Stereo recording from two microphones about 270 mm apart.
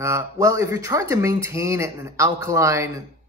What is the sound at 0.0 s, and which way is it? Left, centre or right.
Speech, centre.